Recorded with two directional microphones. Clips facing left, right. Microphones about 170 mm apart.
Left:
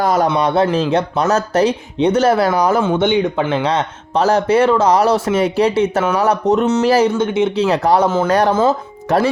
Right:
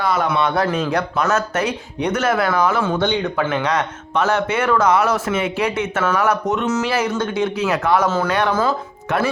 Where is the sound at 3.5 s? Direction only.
30° left (ahead or behind).